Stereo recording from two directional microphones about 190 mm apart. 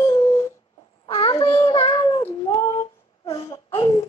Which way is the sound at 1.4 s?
15° left (ahead or behind).